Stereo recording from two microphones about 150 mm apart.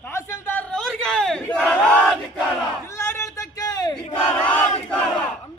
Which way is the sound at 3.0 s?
15° left (ahead or behind).